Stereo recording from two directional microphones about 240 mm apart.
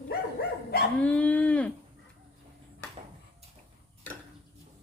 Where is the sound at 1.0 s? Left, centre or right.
Centre.